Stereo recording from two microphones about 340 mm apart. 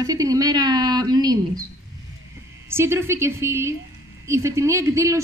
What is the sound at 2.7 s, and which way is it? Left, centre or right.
Speech, centre.